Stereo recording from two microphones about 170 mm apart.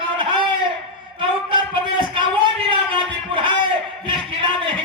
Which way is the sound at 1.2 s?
30° right (ahead or behind).